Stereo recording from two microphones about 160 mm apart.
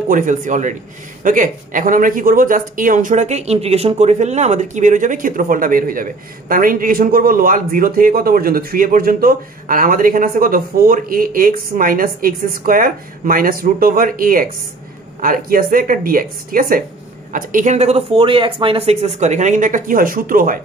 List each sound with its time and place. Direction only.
0.1 s speech: 55° right (ahead or behind)